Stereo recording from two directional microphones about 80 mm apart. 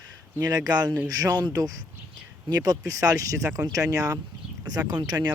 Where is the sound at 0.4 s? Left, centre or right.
Right.